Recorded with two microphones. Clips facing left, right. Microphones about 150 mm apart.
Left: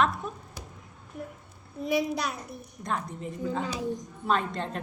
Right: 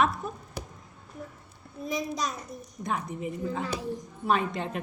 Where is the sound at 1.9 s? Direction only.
65° left (ahead or behind).